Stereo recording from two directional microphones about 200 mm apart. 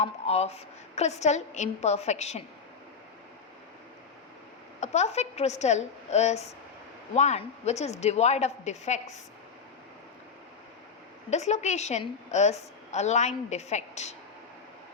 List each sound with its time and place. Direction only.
0.0 s a woman's voice: 30° left (ahead or behind)
4.8 s a woman's voice: 35° left (ahead or behind)
11.3 s a woman's voice: 35° left (ahead or behind)